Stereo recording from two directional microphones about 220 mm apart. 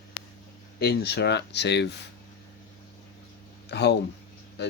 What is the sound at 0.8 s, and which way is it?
Speech, 45° left (ahead or behind).